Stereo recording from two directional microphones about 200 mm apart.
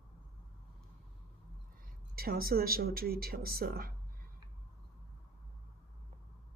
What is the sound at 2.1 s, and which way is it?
Speech, 50° right (ahead or behind).